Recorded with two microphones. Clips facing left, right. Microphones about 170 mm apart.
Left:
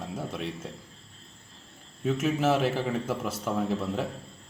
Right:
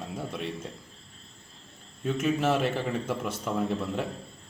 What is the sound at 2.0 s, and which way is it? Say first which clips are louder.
A man's voice: left 1 dB; 5° left (ahead or behind).